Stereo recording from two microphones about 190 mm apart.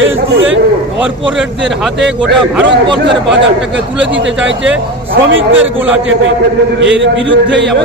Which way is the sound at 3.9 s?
75° right (ahead or behind).